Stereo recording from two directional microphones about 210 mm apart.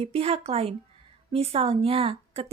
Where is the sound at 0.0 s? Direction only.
30° right (ahead or behind).